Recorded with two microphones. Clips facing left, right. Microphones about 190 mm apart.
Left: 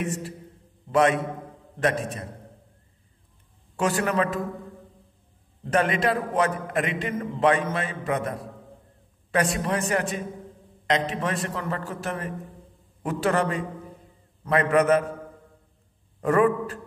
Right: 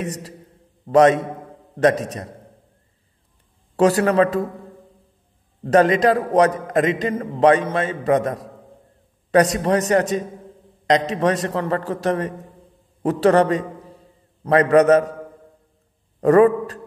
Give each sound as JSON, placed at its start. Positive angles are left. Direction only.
{"t": 0.0, "sound": "a man's voice", "side_deg": -40}
{"t": 3.7, "sound": "a man's voice", "side_deg": -35}
{"t": 5.6, "sound": "a man's voice", "side_deg": -40}
{"t": 16.2, "sound": "a man's voice", "side_deg": -40}